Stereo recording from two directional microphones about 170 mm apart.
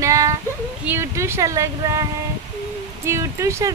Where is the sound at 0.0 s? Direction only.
20° right (ahead or behind).